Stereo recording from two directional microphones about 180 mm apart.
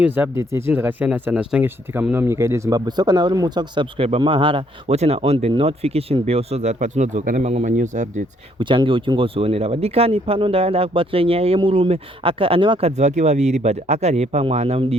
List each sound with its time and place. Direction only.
0.0 s speech: 10° right (ahead or behind); by 8.2 s 45° right (ahead or behind)
8.5 s speech: 25° right (ahead or behind)
13.0 s speech: 40° right (ahead or behind)